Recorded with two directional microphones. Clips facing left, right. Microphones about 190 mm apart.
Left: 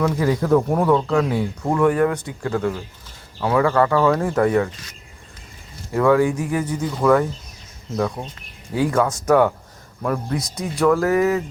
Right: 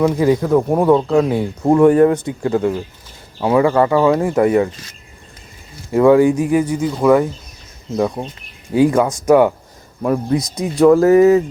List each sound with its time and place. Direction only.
0.0 s speech: 20° right (ahead or behind)
5.9 s speech: 20° right (ahead or behind)